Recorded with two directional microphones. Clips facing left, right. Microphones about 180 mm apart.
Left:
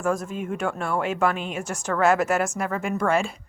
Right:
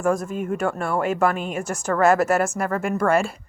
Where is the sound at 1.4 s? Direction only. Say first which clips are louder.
Right 3 dB; 45° right (ahead or behind).